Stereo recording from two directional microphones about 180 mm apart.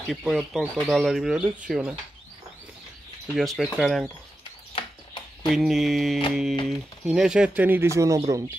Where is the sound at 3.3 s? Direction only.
Centre (ahead or behind).